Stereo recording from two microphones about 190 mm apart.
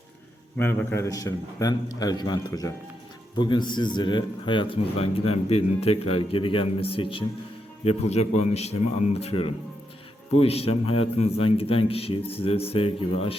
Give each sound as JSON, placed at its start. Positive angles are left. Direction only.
{"t": 0.6, "sound": "a man's voice", "side_deg": 10}